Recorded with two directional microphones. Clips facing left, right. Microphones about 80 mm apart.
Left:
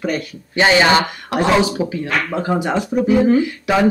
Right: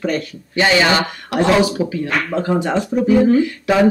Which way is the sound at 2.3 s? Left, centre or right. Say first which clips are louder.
Right 2 dB; centre.